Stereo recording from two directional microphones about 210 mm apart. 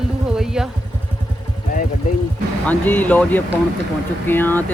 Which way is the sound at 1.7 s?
40° left (ahead or behind).